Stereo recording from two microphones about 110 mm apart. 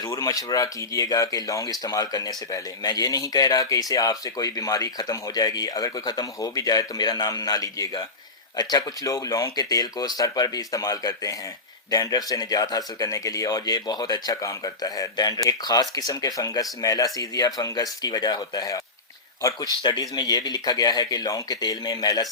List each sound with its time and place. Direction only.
0.0 s speech: 35° left (ahead or behind)